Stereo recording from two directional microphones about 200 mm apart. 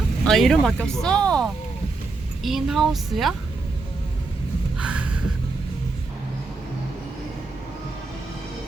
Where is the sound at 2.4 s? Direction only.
Centre (ahead or behind).